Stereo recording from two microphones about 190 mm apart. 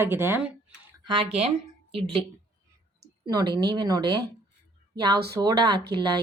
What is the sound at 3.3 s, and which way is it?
Speech, 20° right (ahead or behind).